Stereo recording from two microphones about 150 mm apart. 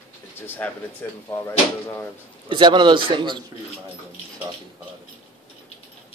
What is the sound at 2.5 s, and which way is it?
Speech, 30° right (ahead or behind).